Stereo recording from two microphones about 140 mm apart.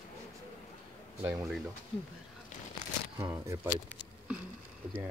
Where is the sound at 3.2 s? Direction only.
15° right (ahead or behind).